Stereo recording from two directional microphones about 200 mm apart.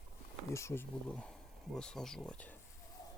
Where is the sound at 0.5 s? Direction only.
10° left (ahead or behind).